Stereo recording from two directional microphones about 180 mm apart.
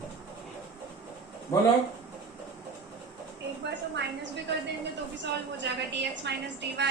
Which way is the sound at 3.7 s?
85° right.